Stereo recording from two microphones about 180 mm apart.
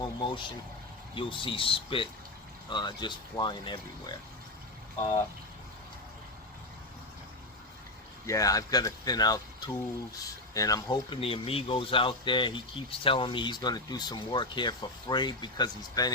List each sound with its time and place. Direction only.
0.0 s speech: 25° left (ahead or behind)
8.3 s speech: 20° left (ahead or behind)